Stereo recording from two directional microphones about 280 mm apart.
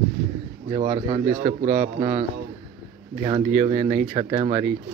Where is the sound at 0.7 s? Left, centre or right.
Right.